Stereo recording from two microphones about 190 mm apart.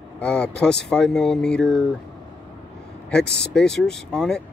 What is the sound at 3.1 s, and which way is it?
Speech, 5° left (ahead or behind).